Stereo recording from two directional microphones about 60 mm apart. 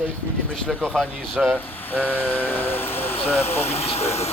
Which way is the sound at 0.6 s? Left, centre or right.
Centre.